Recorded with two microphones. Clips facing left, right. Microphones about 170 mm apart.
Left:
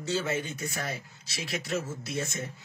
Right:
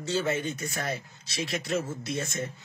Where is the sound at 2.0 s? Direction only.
5° left (ahead or behind).